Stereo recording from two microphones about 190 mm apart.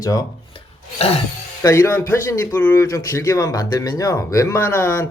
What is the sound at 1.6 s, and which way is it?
Speech, 15° left (ahead or behind).